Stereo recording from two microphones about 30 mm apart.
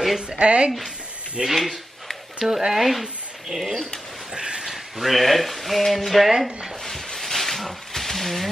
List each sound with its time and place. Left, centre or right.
0.4 s a woman's voice: right
2.3 s speech: centre
4.3 s a sound: right
4.6 s speech: centre
6.3 s speech: centre
6.8 s a sound: centre